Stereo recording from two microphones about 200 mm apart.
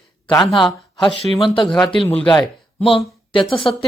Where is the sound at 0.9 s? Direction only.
Centre (ahead or behind).